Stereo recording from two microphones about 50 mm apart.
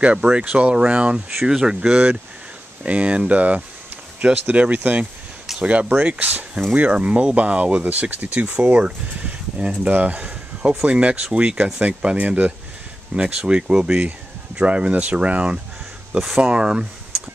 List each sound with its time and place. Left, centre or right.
0.0 s speech: centre
1.4 s speech: centre
2.8 s speech: right
9.8 s a sound: right
10.9 s speech: right